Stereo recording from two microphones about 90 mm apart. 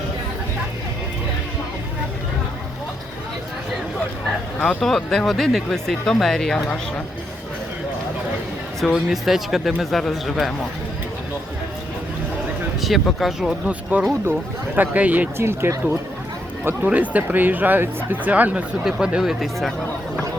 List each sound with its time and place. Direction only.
4.6 s speech: 5° left (ahead or behind)
8.8 s speech: centre (ahead or behind)
12.8 s speech: centre (ahead or behind)
13.9 s speech: 20° right (ahead or behind)
15.4 s speech: 25° right (ahead or behind)
18.9 s speech: 5° right (ahead or behind)